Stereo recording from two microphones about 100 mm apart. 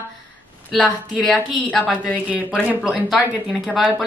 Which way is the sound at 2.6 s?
15° right (ahead or behind).